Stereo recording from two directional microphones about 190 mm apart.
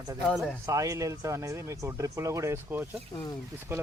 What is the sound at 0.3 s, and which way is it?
Speech, centre (ahead or behind).